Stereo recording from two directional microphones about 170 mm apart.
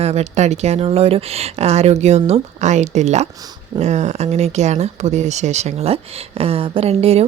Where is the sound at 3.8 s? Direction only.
40° right (ahead or behind).